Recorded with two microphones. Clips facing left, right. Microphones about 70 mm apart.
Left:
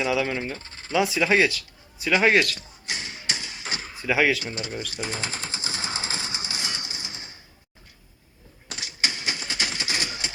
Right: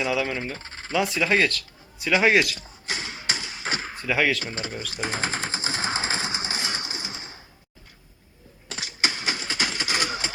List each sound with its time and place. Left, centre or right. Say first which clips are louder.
0.0 s speech: left 1 dB; centre
0.4 s speech: left 1 dB; right
0.9 s speech: left 1 dB; centre
2.9 s a sound: right 2 dB; right
4.0 s speech: left 2 dB; centre
4.4 s speech: even; right
4.9 s sewing machine: right 8 dB; right
8.7 s a sound: right 2 dB; right